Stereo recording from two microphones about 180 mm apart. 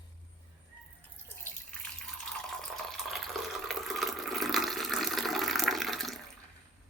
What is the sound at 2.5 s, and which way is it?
Water, centre (ahead or behind).